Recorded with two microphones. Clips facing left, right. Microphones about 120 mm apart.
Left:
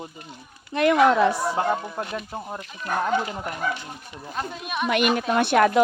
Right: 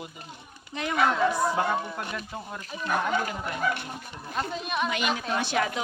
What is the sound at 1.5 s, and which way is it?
Speech, 30° left (ahead or behind).